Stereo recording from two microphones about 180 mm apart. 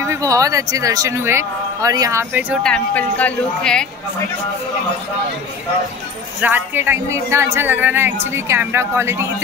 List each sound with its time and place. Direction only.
0.0 s a man's voice: 15° right (ahead or behind)
2.5 s speech: 5° left (ahead or behind)
6.4 s a man's voice: 10° right (ahead or behind)